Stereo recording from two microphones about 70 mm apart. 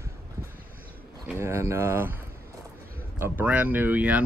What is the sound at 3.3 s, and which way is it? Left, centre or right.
Speech, right.